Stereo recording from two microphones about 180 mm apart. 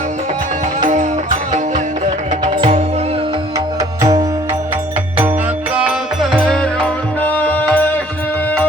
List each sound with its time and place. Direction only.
0.8 s music: 45° right (ahead or behind)
3.8 s tabla: 20° right (ahead or behind)
5.7 s music: 5° right (ahead or behind)